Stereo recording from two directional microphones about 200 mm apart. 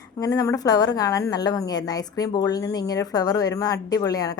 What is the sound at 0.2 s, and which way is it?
A woman's voice, 15° left (ahead or behind).